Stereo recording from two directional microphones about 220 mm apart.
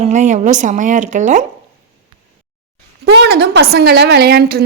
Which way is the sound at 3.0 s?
50° right (ahead or behind).